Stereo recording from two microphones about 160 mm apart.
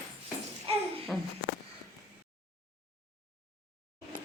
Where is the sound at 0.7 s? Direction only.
35° right (ahead or behind).